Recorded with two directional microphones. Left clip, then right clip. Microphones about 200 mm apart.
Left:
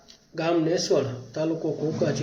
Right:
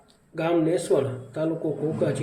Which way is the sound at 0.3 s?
5° left (ahead or behind).